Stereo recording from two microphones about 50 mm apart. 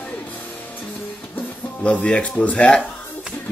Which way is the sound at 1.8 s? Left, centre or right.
Left.